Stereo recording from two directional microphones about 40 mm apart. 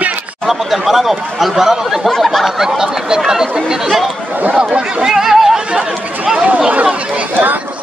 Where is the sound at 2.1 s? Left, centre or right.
Centre.